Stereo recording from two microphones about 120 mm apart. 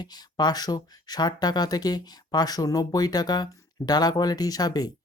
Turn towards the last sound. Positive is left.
turn(degrees=35)  # may be behind; listen again after turning